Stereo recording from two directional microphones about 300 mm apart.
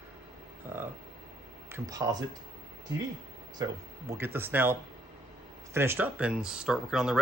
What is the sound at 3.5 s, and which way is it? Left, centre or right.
Speech, centre.